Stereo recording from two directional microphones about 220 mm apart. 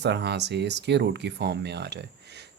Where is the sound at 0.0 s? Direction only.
50° right (ahead or behind).